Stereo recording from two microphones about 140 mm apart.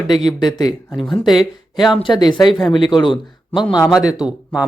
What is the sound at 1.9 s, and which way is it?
Speech, 35° left (ahead or behind).